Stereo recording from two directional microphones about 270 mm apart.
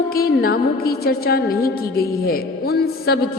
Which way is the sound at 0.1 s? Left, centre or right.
Left.